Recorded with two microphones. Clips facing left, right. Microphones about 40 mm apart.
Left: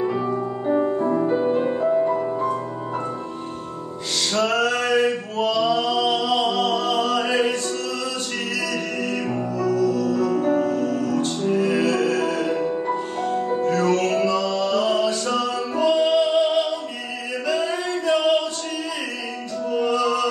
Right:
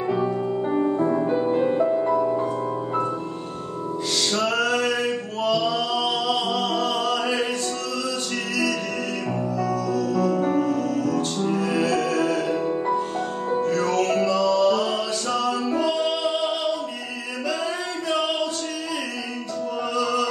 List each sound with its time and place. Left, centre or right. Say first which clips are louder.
0.0 s music: even; centre
1.9 s music: left 1 dB; centre
4.3 s male singing: left 3 dB; centre
9.6 s music: left 5 dB; centre
17.5 s singing: left 4 dB; centre
19.8 s music: left 3 dB; centre